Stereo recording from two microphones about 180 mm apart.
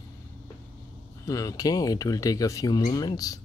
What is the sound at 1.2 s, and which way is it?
Speech, 20° left (ahead or behind).